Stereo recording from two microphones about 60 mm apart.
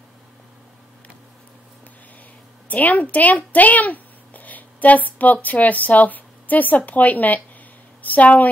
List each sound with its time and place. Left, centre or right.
2.7 s a woman's voice: left